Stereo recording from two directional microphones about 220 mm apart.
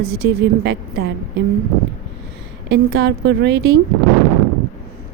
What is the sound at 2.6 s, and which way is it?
A woman's voice, 55° right (ahead or behind).